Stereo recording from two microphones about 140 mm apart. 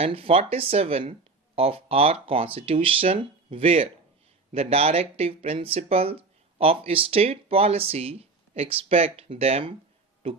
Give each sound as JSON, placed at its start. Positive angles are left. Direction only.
{"t": 0.0, "sound": "speech", "side_deg": -45}